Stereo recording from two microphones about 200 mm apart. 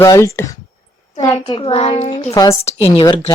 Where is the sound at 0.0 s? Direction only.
15° left (ahead or behind).